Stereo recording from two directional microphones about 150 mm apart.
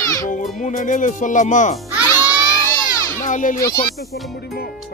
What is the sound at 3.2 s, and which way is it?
Speech, 60° left (ahead or behind).